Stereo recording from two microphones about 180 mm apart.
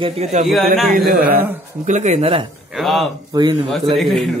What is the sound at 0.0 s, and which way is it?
Speech, 35° right (ahead or behind).